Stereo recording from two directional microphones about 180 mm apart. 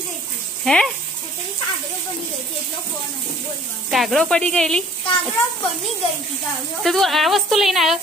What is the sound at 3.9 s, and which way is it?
Speech, centre (ahead or behind).